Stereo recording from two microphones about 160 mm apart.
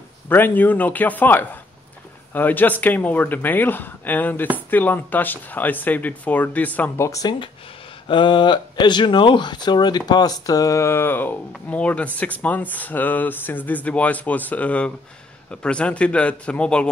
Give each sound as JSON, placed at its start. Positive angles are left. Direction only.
{"t": 0.3, "sound": "speech", "side_deg": 10}
{"t": 7.1, "sound": "speech", "side_deg": 25}